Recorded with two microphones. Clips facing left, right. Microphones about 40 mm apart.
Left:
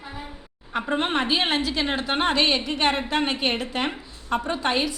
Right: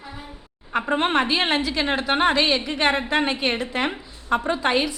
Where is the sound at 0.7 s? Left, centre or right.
Centre.